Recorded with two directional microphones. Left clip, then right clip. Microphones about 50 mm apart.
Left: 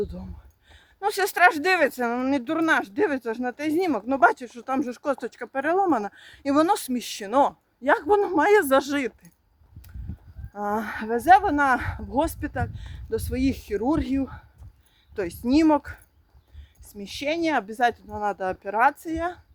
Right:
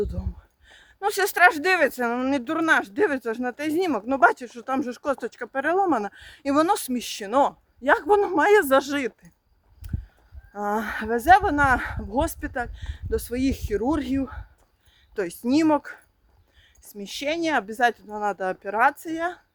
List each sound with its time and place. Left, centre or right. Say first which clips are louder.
0.0 s a woman's voice: right 2 dB; right
4.0 s a woman's voice: right 1 dB; centre
7.8 s speech: right 1 dB; right
8.0 s speech: right 1 dB; right
8.4 s a woman's voice: right 1 dB; centre
8.6 s speech: right 1 dB; centre
10.5 s a woman's voice: right 1 dB; right
16.8 s a woman's voice: even; right